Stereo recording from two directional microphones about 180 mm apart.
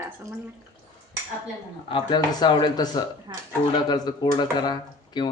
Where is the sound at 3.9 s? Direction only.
25° left (ahead or behind).